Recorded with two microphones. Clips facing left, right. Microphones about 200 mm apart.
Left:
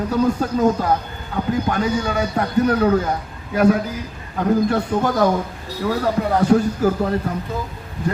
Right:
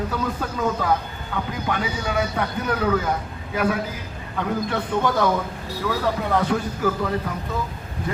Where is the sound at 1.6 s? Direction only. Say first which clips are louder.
Left 5 dB; 45° left (ahead or behind).